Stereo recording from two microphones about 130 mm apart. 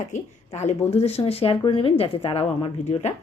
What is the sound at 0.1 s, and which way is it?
Speech, 60° left (ahead or behind).